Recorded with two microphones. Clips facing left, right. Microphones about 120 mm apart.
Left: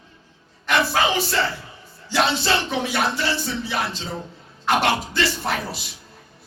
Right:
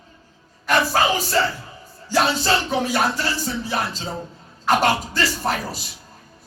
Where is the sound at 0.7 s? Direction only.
40° right (ahead or behind).